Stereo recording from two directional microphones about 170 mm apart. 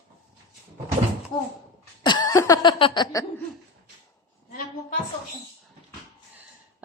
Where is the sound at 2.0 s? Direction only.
25° left (ahead or behind).